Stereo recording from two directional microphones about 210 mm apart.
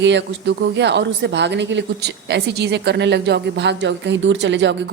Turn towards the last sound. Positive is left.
turn(degrees=-55)  # may be behind; listen again after turning